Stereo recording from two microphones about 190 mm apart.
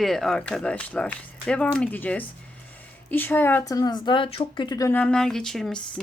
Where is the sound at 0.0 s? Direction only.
Centre (ahead or behind).